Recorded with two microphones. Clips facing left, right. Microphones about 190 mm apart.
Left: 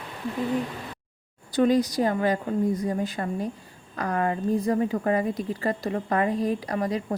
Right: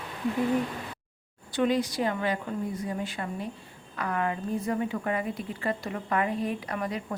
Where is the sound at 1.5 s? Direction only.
40° left (ahead or behind).